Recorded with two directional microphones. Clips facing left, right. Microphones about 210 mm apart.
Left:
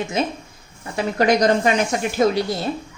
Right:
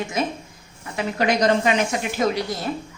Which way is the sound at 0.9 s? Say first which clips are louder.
Left 4 dB; 40° left (ahead or behind).